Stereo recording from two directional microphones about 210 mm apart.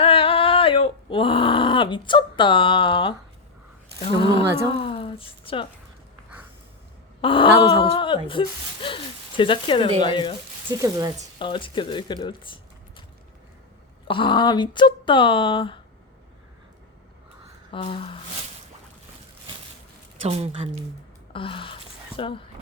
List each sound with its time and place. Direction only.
0.0 s a sound: 25° left (ahead or behind)
4.0 s speech: 25° left (ahead or behind)
4.8 s a sound: 25° left (ahead or behind)
7.2 s speech: 25° left (ahead or behind)
10.7 s speech: 15° right (ahead or behind)
11.3 s speech: 25° left (ahead or behind)
14.1 s speech: 25° left (ahead or behind)
17.7 s speech: 25° left (ahead or behind)
20.2 s speech: 30° right (ahead or behind)
21.3 s speech: 25° left (ahead or behind)